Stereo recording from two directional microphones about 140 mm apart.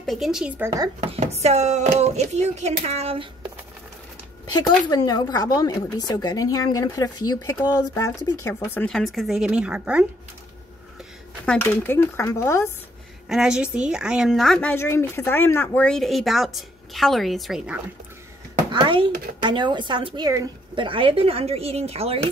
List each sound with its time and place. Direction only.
0.0 s a woman's voice: centre (ahead or behind)
0.6 s a woman's voice: 25° right (ahead or behind)
1.0 s speech: 45° right (ahead or behind)
4.5 s speech: 30° left (ahead or behind)
8.8 s speech: 5° left (ahead or behind)
11.4 s speech: 15° left (ahead or behind)
13.3 s a woman's voice: 5° right (ahead or behind)
18.7 s a child's voice: 35° right (ahead or behind)
20.2 s a woman's voice: 25° right (ahead or behind)
20.7 s speech: 35° right (ahead or behind)